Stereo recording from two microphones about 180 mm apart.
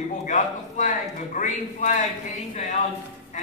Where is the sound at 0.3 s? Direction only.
45° left (ahead or behind).